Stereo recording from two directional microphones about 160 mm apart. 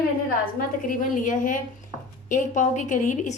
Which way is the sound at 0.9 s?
55° left (ahead or behind).